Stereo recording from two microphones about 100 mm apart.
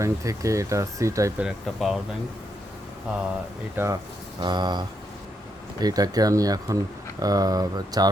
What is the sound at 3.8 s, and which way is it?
Speech, 20° right (ahead or behind).